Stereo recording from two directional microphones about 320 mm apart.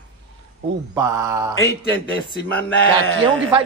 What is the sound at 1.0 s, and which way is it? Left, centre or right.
Speech, centre.